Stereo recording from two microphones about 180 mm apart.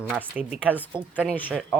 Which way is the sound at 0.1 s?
10° right (ahead or behind).